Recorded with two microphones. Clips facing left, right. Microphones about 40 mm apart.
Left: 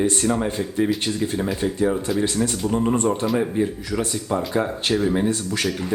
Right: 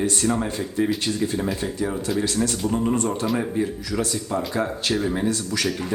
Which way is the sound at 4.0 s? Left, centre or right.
Left.